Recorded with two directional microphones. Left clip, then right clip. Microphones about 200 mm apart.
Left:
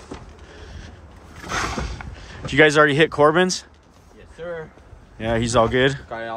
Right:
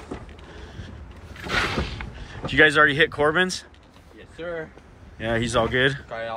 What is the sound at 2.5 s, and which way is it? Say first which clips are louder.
Speech: left 2 dB; 25° left (ahead or behind).